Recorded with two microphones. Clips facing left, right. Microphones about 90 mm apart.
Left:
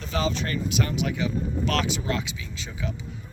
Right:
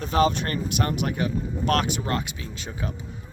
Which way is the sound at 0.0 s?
50° right (ahead or behind).